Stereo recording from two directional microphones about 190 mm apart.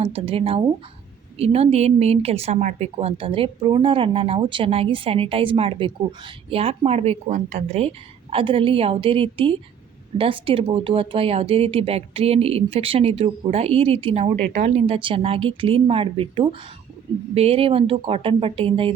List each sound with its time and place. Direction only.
0.0 s speech: 30° right (ahead or behind)